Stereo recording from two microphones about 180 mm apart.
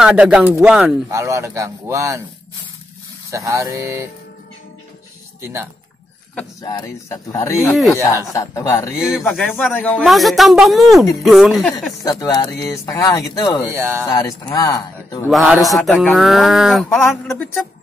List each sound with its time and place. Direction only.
0.0 s speech: 5° right (ahead or behind)
1.1 s speech: 15° right (ahead or behind)
3.3 s speech: 15° right (ahead or behind)
5.4 s speech: 15° right (ahead or behind)
6.6 s speech: 20° left (ahead or behind)
9.2 s speech: centre (ahead or behind)
12.0 s speech: 20° left (ahead or behind)
13.7 s speech: 15° right (ahead or behind)
14.0 s speech: 20° left (ahead or behind)
15.3 s speech: centre (ahead or behind)